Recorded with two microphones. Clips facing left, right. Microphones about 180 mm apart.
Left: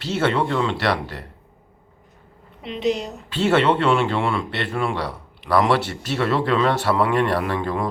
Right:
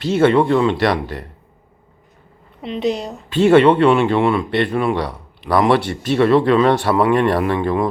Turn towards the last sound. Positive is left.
turn(degrees=-20)  # may be behind; listen again after turning